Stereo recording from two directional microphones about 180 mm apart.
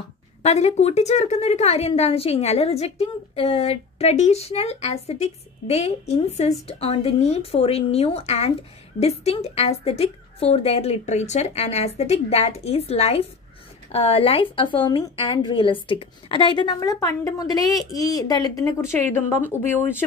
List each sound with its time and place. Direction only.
0.4 s a woman's voice: 35° left (ahead or behind); by 18.9 s 15° left (ahead or behind)